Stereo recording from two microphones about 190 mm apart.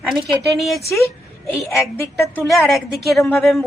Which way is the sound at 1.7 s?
15° left (ahead or behind).